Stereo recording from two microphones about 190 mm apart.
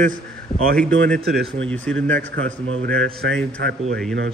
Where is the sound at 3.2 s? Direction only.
65° right (ahead or behind).